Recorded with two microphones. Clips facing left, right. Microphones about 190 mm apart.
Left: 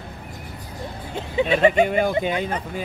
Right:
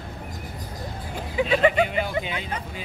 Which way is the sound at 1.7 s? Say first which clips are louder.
Left 5 dB; 45° left (ahead or behind).